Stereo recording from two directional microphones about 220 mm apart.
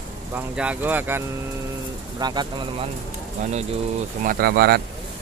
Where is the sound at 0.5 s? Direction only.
5° right (ahead or behind).